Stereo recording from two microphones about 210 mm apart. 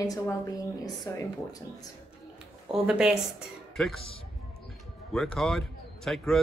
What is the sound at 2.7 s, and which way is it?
Speech, centre (ahead or behind).